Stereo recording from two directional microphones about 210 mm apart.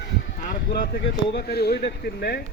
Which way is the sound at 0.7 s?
50° left (ahead or behind).